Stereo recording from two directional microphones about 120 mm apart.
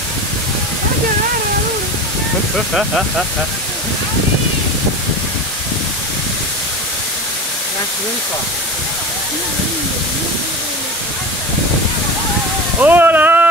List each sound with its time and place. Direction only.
12.8 s speech: 15° right (ahead or behind)